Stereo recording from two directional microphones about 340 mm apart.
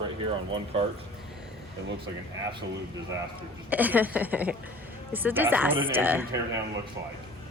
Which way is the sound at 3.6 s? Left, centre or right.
Centre.